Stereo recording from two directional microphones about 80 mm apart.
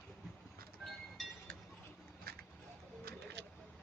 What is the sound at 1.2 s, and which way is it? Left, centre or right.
Chink, centre.